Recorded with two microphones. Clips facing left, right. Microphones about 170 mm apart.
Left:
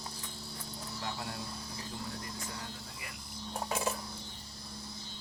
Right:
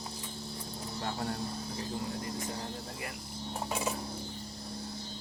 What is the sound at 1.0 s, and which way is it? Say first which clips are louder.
Speech: right 5 dB; 40° right (ahead or behind).